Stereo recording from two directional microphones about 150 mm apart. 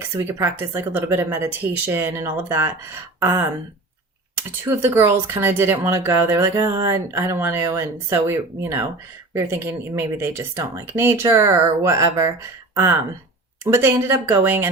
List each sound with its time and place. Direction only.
0.2 s speech: 20° right (ahead or behind)